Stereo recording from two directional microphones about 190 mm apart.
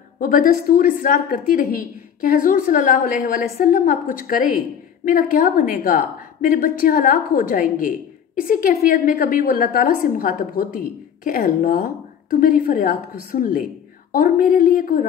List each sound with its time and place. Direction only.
0.2 s a woman's voice: 45° left (ahead or behind)